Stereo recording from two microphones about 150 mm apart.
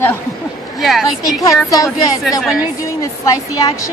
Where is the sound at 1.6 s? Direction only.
20° left (ahead or behind).